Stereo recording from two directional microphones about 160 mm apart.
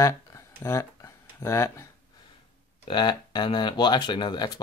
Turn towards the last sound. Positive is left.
turn(degrees=25)  # may be behind; listen again after turning